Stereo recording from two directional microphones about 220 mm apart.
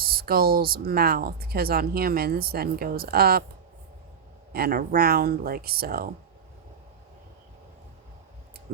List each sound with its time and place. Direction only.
0.0 s speech: 40° right (ahead or behind)
4.5 s speech: 40° right (ahead or behind)